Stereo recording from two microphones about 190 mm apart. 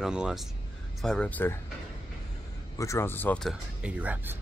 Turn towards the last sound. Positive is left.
turn(degrees=-10)  # may be behind; listen again after turning